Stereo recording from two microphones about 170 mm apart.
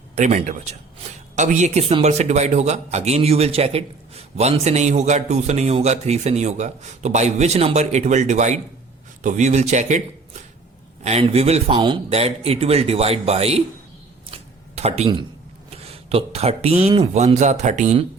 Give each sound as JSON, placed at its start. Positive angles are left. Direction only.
{"t": 0.2, "sound": "a man's voice", "side_deg": -45}
{"t": 11.0, "sound": "a man's voice", "side_deg": -40}
{"t": 14.8, "sound": "a man's voice", "side_deg": -40}